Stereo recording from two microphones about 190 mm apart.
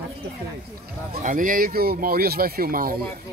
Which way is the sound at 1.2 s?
45° right (ahead or behind).